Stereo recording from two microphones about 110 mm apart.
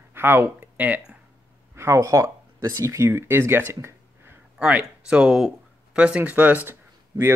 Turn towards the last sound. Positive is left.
turn(degrees=-20)  # may be behind; listen again after turning